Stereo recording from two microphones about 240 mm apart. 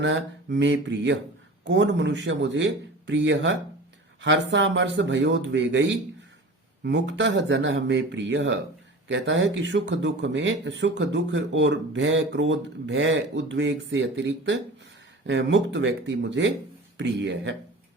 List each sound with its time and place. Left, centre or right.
0.0 s speech: right